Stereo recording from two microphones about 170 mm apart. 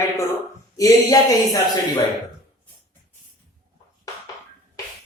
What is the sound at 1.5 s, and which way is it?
Speech, 25° left (ahead or behind).